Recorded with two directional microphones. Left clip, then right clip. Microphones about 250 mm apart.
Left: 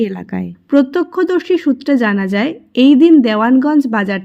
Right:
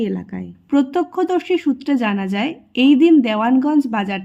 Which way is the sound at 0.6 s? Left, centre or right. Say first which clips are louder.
Left 5 dB; centre.